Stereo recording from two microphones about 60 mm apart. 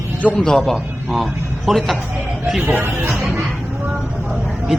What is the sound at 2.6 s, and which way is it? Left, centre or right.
Speech, right.